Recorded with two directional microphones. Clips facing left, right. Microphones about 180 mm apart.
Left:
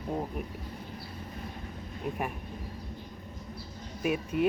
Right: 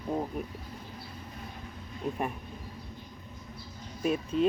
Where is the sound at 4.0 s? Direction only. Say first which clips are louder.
Right 1 dB; 15° left (ahead or behind).